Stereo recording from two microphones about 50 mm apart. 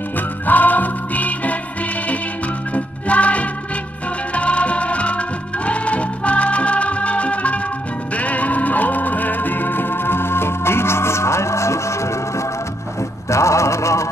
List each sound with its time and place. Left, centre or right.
0.5 s music: left
2.7 s music: left